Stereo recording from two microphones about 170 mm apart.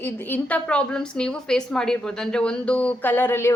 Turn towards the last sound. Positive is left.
turn(degrees=15)  # may be behind; listen again after turning